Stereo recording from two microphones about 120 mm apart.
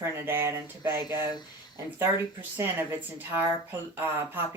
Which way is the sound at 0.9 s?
35° left (ahead or behind).